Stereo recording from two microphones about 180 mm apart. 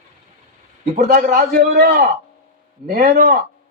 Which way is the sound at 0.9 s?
45° right (ahead or behind).